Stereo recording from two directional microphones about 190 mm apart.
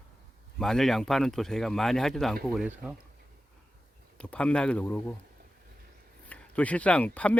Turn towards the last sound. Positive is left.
turn(degrees=5)  # may be behind; listen again after turning